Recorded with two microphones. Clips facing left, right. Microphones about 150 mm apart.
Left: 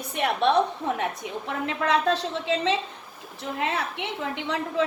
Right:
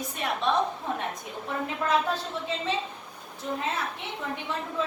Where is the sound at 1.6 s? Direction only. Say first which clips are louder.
Left 3 dB; 90° left.